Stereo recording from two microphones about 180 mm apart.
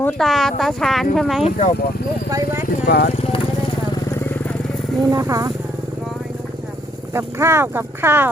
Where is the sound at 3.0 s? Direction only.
35° left (ahead or behind); by 4.9 s 5° left (ahead or behind).